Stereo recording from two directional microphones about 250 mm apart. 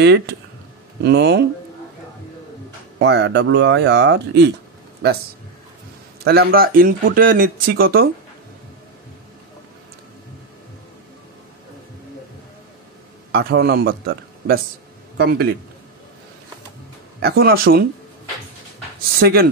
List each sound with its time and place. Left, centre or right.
0.0 s speech: right
3.0 s speech: right
6.2 s speech: right
13.3 s speech: right
17.2 s speech: right
19.1 s speech: right